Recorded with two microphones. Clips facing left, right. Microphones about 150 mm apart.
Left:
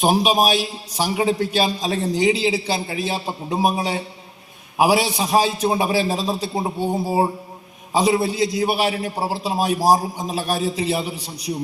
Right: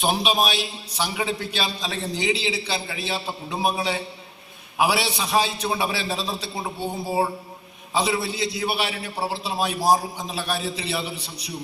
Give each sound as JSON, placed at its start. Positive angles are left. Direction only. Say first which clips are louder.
{"t": 0.0, "sound": "a man's voice", "louder": "left 5 dB", "side_deg": 45}